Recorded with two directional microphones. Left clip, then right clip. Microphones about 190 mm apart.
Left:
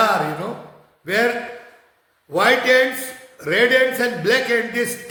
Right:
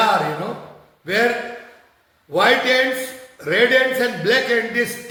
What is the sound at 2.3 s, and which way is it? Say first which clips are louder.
A man's voice: even; 20° left (ahead or behind).